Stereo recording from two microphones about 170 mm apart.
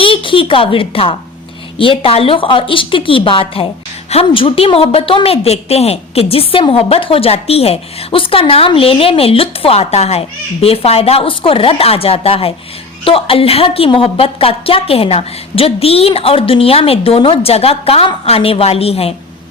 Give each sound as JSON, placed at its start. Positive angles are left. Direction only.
{"t": 0.0, "sound": "a woman's voice", "side_deg": 30}